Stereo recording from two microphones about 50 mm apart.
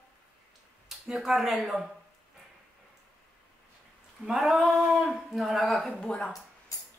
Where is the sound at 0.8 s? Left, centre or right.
Centre.